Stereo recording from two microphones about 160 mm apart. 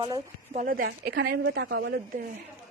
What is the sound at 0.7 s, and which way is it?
A woman's voice, 70° right (ahead or behind).